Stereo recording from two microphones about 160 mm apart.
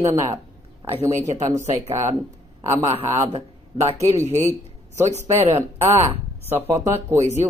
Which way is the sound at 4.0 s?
20° right (ahead or behind).